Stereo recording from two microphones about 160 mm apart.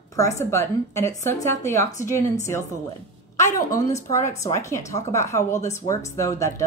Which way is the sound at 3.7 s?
45° left (ahead or behind).